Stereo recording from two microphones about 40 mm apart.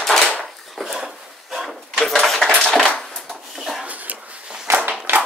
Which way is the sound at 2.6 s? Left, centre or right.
Centre.